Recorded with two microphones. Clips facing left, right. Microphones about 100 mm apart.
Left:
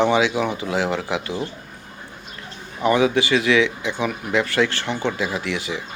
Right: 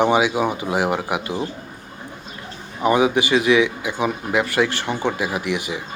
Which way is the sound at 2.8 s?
20° right (ahead or behind).